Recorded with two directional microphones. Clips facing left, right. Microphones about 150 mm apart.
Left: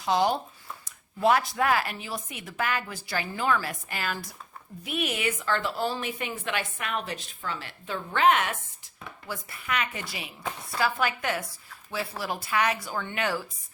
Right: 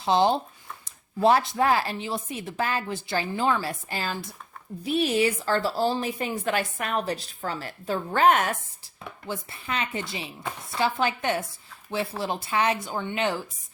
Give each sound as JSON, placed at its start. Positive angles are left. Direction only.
{"t": 0.0, "sound": "a woman's voice", "side_deg": -30}
{"t": 9.2, "sound": "speech", "side_deg": -25}